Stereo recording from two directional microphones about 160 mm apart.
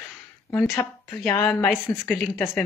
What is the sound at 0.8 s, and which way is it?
Speech, 20° left (ahead or behind).